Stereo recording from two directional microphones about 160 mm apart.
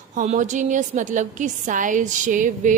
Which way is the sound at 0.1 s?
50° right (ahead or behind).